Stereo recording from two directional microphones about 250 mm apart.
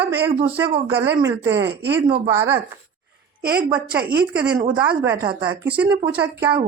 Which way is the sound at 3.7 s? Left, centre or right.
Centre.